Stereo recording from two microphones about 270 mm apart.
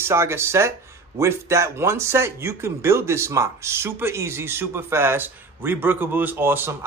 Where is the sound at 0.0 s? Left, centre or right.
Centre.